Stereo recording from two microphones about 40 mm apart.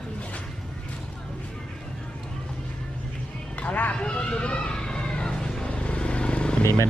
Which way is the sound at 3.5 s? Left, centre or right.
Left.